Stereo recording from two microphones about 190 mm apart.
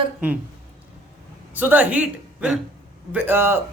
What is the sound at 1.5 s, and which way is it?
A woman's voice, 10° right (ahead or behind).